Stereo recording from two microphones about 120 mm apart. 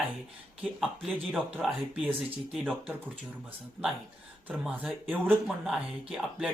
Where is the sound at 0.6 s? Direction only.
5° right (ahead or behind).